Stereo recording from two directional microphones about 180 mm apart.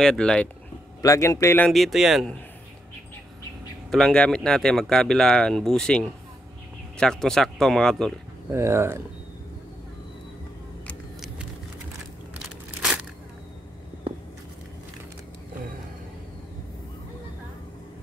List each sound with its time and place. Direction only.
0.0 s speech: 5° left (ahead or behind)
1.0 s a man's voice: 20° left (ahead or behind)
1.7 s speech: centre (ahead or behind)
3.9 s speech: 5° left (ahead or behind)
8.5 s speech: 15° right (ahead or behind)
10.9 s vehicle: centre (ahead or behind)